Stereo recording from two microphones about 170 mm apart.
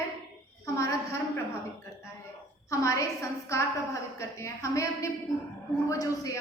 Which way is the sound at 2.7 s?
20° left (ahead or behind).